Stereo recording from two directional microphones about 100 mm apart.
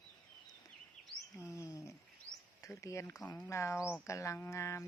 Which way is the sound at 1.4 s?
30° left (ahead or behind).